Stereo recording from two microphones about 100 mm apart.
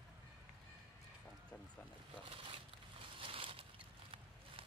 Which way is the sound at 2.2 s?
65° right (ahead or behind).